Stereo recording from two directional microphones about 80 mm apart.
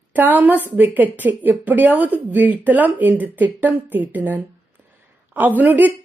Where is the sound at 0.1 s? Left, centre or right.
Right.